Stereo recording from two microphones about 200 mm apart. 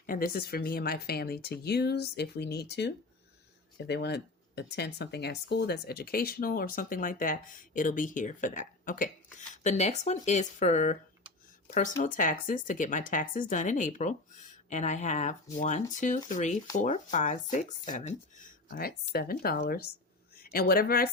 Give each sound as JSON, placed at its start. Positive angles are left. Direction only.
{"t": 0.0, "sound": "speech", "side_deg": 45}
{"t": 12.0, "sound": "speech", "side_deg": 40}